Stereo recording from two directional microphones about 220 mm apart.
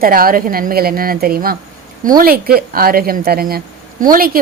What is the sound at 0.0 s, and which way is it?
A woman's voice, 40° right (ahead or behind).